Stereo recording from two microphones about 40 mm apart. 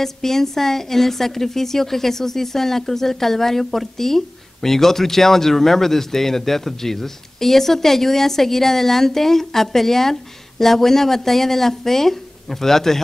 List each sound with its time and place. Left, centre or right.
0.0 s a woman's voice: centre